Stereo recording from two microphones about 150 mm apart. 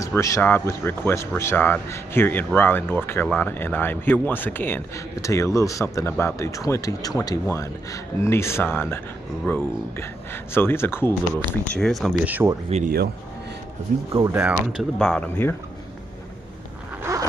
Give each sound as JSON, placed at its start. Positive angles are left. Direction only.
{"t": 0.0, "sound": "speech", "side_deg": 20}
{"t": 11.5, "sound": "speech", "side_deg": 5}
{"t": 12.3, "sound": "speech", "side_deg": -10}
{"t": 12.8, "sound": "speech", "side_deg": -90}
{"t": 14.3, "sound": "speech", "side_deg": -5}
{"t": 15.2, "sound": "speech", "side_deg": 15}
{"t": 17.0, "sound": "zipper", "side_deg": -20}